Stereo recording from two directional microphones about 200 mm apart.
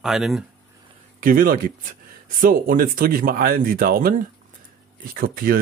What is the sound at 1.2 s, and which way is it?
Speech, 45° right (ahead or behind).